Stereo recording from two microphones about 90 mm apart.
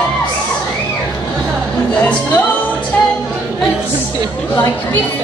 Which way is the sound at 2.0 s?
20° left (ahead or behind).